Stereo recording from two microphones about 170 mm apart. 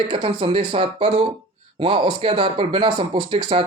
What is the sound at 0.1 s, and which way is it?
Speech, 30° right (ahead or behind).